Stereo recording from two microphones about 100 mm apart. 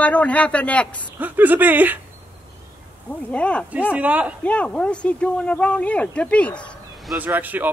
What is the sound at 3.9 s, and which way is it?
Speech, 15° right (ahead or behind).